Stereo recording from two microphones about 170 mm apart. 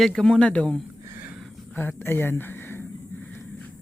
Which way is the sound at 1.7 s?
10° left (ahead or behind).